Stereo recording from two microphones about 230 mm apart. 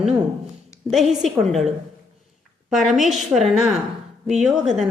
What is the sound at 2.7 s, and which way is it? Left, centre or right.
A woman's voice, centre.